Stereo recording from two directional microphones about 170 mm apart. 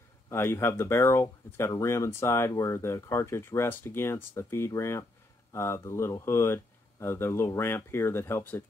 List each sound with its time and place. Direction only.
0.3 s speech: 15° left (ahead or behind)